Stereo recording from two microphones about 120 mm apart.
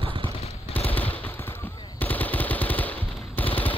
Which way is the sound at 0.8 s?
15° left (ahead or behind).